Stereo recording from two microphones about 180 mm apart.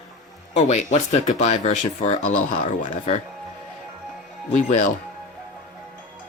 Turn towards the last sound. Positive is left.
turn(degrees=45)  # may be behind; listen again after turning